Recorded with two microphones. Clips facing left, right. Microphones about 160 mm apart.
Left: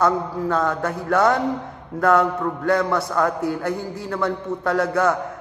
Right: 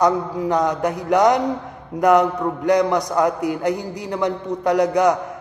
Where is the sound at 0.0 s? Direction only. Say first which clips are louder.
Right 2 dB; 15° right (ahead or behind).